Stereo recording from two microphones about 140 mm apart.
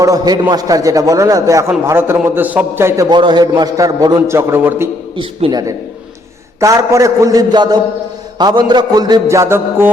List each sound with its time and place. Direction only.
0.0 s a man's voice: 25° right (ahead or behind)
3.2 s a man's voice: 30° right (ahead or behind); by 4.9 s 15° right (ahead or behind)
5.1 s a man's voice: 30° right (ahead or behind)